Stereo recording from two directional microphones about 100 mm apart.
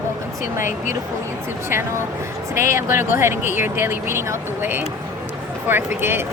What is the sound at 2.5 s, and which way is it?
Speech, 25° right (ahead or behind).